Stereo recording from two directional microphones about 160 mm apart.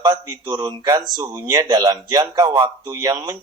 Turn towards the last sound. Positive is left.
turn(degrees=-25)  # may be behind; listen again after turning